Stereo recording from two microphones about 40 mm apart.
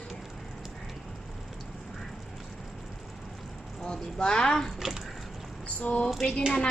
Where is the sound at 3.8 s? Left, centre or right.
Left.